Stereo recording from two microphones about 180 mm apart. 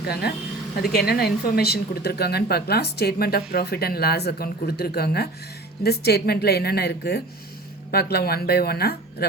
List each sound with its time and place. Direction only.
0.1 s a woman's voice: 60° left (ahead or behind)